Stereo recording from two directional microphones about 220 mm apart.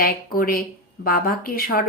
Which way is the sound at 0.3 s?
40° left (ahead or behind).